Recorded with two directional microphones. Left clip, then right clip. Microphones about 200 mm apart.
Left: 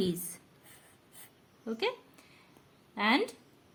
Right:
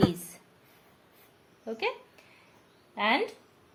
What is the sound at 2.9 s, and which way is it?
Speech, 25° left (ahead or behind).